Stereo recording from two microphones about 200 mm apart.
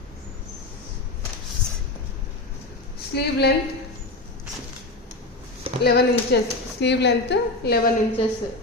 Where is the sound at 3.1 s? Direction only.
55° left (ahead or behind).